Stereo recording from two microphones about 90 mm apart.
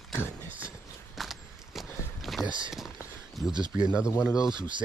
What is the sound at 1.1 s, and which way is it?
Walk, centre (ahead or behind).